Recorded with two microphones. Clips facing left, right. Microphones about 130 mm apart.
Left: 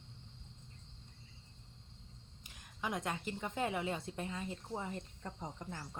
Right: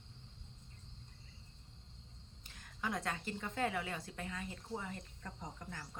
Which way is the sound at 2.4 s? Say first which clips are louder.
Even; 15° left (ahead or behind).